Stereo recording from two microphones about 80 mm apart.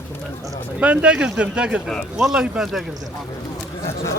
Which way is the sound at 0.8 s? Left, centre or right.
Centre.